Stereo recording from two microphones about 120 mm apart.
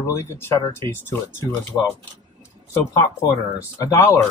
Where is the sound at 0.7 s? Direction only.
20° left (ahead or behind).